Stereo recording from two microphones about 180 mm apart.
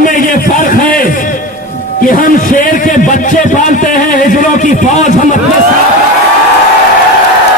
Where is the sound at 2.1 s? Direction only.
50° left (ahead or behind).